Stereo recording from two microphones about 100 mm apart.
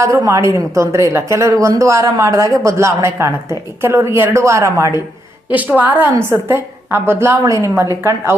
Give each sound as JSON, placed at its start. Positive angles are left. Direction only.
{"t": 0.0, "sound": "a woman's voice", "side_deg": -30}
{"t": 5.5, "sound": "a woman's voice", "side_deg": -15}